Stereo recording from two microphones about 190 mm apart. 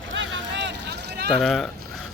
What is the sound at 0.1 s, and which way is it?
Run, 70° right (ahead or behind).